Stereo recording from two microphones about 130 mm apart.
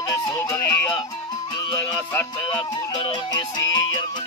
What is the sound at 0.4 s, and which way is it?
Music, 15° left (ahead or behind).